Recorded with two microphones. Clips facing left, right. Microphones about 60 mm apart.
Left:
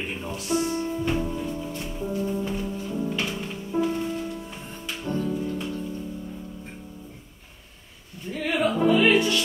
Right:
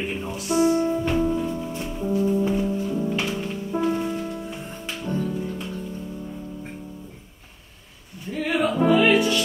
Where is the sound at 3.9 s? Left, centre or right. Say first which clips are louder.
Right 3 dB; right.